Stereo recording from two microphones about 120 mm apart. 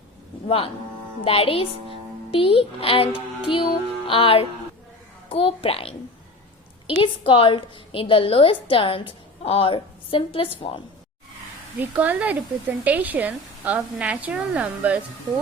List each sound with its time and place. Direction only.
0.4 s a woman's voice: 50° left (ahead or behind)
4.0 s music: 50° left (ahead or behind)
5.3 s a woman's voice: 50° left (ahead or behind)
11.8 s speech: 15° right (ahead or behind)